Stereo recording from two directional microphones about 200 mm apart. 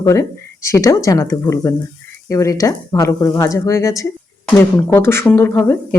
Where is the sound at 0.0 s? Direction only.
15° left (ahead or behind).